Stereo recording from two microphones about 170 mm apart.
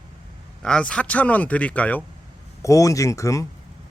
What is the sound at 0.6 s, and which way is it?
Speech, 5° left (ahead or behind).